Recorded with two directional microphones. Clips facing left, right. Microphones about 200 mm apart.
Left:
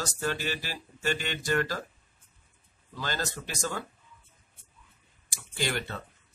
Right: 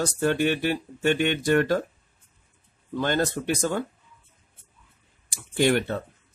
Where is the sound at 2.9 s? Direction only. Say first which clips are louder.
Right 10 dB; 60° right (ahead or behind).